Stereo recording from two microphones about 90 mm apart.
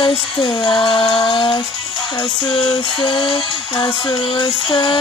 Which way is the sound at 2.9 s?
65° left (ahead or behind).